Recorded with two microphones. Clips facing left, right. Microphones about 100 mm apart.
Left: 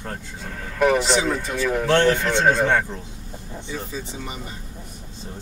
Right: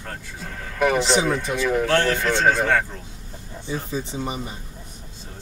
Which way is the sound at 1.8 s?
20° left (ahead or behind).